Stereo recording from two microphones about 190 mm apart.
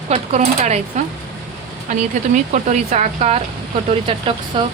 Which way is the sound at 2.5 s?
40° right (ahead or behind).